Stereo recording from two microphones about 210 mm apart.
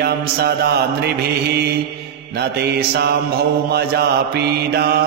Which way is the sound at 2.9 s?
50° right (ahead or behind).